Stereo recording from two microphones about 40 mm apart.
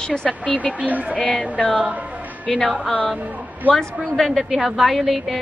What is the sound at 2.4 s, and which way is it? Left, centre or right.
Speech, centre.